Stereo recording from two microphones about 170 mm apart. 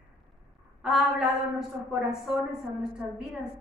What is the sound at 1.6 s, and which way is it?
A woman's voice, centre (ahead or behind).